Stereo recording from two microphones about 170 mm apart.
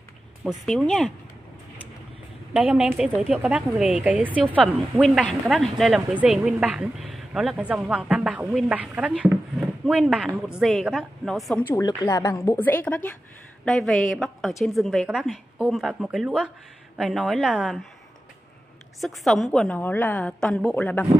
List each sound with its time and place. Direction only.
0.4 s a woman's voice: centre (ahead or behind)
2.5 s a woman's voice: 5° right (ahead or behind)
5.0 s a woman's voice: 5° left (ahead or behind)
11.6 s a woman's voice: 20° left (ahead or behind); by 17.7 s 5° right (ahead or behind)
18.9 s a woman's voice: centre (ahead or behind)